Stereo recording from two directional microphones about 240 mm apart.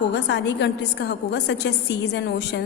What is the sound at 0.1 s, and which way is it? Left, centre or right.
A woman's voice, left.